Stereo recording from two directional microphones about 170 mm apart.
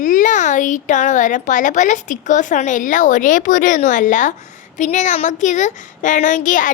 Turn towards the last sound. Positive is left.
turn(degrees=50)  # may be behind; listen again after turning